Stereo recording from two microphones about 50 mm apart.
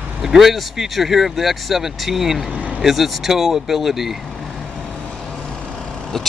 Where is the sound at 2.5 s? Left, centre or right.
Right.